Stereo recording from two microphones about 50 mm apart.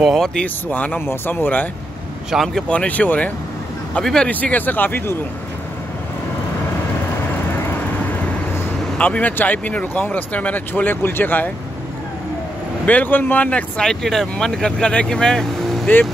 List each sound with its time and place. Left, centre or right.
0.2 s speech: centre
0.7 s speech: left
1.0 s speech: left
2.3 s speech: centre
2.7 s speech: left
4.0 s speech: centre
4.3 s speech: left
8.9 s speech: left
10.7 s speech: left
12.8 s speech: left
13.8 s speech: centre